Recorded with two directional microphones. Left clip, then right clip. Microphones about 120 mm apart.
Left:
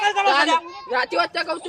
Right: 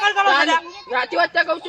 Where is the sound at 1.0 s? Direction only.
20° left (ahead or behind).